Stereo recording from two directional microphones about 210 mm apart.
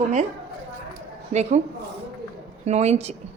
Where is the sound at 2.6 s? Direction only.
30° right (ahead or behind).